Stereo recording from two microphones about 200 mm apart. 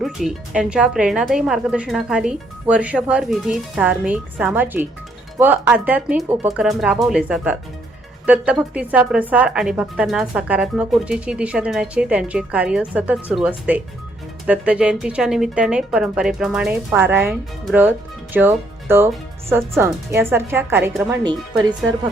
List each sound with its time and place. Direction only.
0.0 s speech: centre (ahead or behind)
21.2 s speech: 20° right (ahead or behind)